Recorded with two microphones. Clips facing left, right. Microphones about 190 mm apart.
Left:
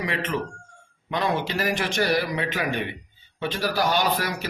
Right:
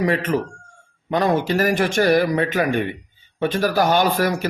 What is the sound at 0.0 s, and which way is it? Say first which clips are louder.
A man's voice: right 7 dB; 45° right (ahead or behind).